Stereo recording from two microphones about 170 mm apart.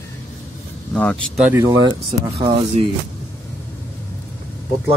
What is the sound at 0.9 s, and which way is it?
Speech, 10° left (ahead or behind).